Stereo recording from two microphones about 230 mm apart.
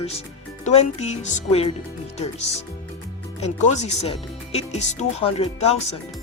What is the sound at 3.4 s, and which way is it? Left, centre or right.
Speech, left.